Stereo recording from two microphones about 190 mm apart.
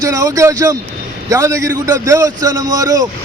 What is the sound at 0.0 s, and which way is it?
A man's voice, 15° right (ahead or behind).